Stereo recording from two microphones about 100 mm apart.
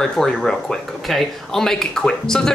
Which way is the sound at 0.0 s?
5° left (ahead or behind).